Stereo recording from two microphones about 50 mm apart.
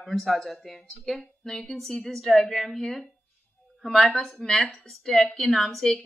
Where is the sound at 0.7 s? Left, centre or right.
Centre.